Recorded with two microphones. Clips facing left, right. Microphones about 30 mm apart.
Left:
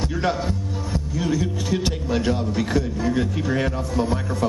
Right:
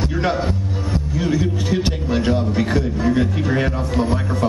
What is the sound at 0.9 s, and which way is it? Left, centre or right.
A man's voice, centre.